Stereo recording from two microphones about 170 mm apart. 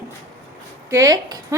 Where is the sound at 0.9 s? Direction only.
20° right (ahead or behind).